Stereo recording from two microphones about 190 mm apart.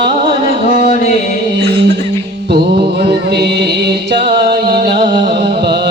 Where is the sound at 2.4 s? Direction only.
55° right (ahead or behind).